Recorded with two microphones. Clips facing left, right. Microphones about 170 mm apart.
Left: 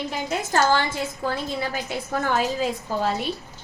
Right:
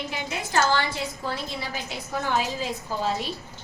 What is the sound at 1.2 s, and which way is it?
A woman's voice, 50° left (ahead or behind).